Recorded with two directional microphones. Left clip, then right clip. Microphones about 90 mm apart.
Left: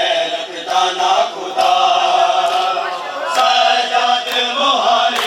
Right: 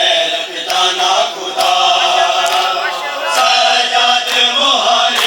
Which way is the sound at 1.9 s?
45° left (ahead or behind).